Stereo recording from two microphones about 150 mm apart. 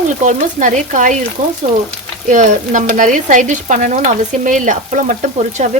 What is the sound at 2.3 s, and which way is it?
Frying, 60° right (ahead or behind).